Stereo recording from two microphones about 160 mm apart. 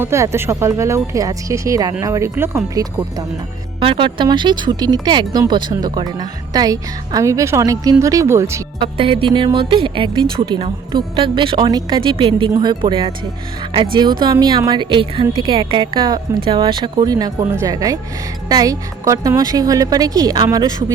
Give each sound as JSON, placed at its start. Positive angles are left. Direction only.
{"t": 0.0, "sound": "speech", "side_deg": -15}
{"t": 3.8, "sound": "speech", "side_deg": -30}
{"t": 8.8, "sound": "a woman's voice", "side_deg": -35}
{"t": 14.2, "sound": "speech", "side_deg": -25}